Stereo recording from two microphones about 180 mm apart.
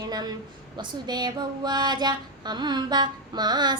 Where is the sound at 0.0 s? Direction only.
20° right (ahead or behind).